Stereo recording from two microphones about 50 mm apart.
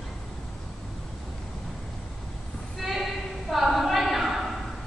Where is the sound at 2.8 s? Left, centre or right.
Centre.